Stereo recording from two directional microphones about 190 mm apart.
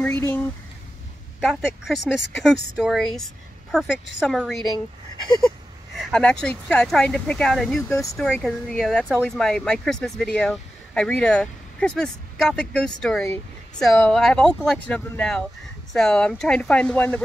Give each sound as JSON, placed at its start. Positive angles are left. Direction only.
{"t": 0.0, "sound": "speech", "side_deg": 10}
{"t": 1.9, "sound": "speech", "side_deg": 0}
{"t": 5.9, "sound": "speech", "side_deg": 0}
{"t": 7.9, "sound": "speech", "side_deg": 15}
{"t": 8.2, "sound": "speech", "side_deg": 5}